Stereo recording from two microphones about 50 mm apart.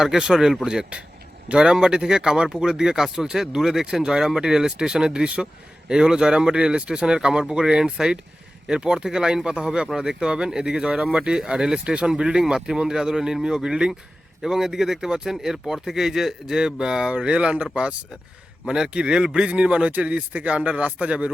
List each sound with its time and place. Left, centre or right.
0.0 s speech: centre